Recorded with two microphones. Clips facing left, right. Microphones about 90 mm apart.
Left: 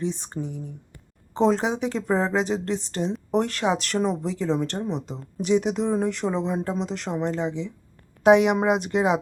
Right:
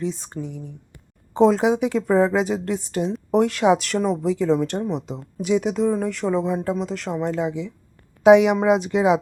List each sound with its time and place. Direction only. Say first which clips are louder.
0.4 s speech: even; 25° left (ahead or behind)
1.3 s speech: right 5 dB; 10° right (ahead or behind)
4.2 s speech: right 5 dB; 10° right (ahead or behind)